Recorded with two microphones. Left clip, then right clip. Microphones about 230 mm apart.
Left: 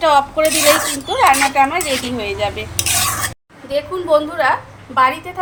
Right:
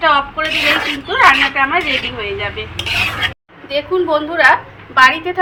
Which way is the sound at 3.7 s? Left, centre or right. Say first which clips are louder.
Right 1 dB; left.